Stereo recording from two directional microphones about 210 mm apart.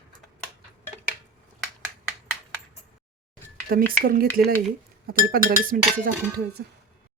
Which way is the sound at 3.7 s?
45° right (ahead or behind).